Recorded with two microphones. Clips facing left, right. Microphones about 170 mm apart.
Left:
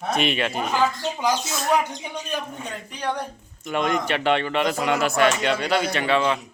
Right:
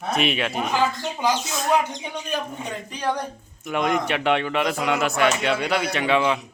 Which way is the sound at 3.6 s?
Centre (ahead or behind).